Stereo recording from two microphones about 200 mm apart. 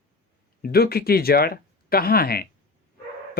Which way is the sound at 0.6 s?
50° left (ahead or behind).